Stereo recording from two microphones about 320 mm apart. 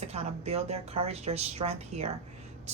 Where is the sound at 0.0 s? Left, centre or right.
Centre.